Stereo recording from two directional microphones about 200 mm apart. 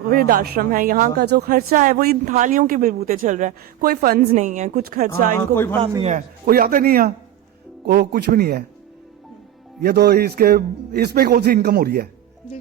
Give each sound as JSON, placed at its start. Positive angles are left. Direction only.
{"t": 0.1, "sound": "speech", "side_deg": -45}
{"t": 5.3, "sound": "speech", "side_deg": 10}
{"t": 5.8, "sound": "speech", "side_deg": -25}
{"t": 9.8, "sound": "speech", "side_deg": -50}